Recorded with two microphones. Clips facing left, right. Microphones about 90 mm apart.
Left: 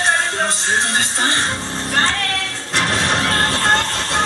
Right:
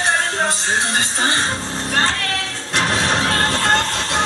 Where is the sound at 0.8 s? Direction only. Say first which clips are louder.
Even; 20° right (ahead or behind).